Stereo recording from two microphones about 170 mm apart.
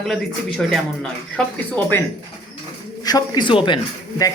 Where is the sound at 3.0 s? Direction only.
25° left (ahead or behind).